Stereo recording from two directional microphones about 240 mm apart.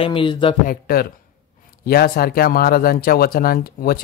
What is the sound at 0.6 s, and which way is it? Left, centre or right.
A man's voice, left.